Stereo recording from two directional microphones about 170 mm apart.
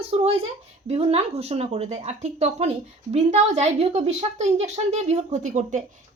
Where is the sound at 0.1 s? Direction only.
35° right (ahead or behind).